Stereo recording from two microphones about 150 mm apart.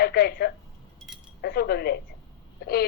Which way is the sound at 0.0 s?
90° left.